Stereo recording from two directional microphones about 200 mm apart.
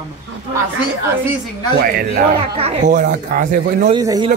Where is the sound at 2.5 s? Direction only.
35° right (ahead or behind).